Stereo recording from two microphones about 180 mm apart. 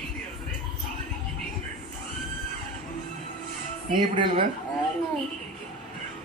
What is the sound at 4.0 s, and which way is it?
Speech, 25° right (ahead or behind).